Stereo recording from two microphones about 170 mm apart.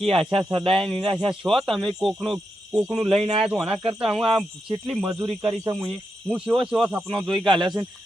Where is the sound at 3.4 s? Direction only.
Centre (ahead or behind).